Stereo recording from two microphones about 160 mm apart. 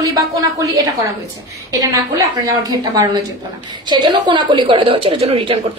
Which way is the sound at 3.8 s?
25° right (ahead or behind).